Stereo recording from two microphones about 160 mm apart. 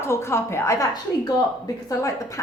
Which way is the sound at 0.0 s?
15° left (ahead or behind).